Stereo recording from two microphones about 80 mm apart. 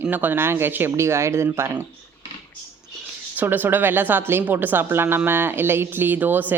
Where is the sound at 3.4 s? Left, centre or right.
Right.